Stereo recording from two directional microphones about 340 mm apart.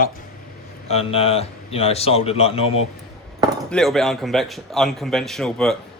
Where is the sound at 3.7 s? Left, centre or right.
Centre.